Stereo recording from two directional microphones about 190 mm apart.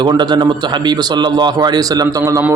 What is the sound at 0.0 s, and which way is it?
A man's voice, 25° right (ahead or behind).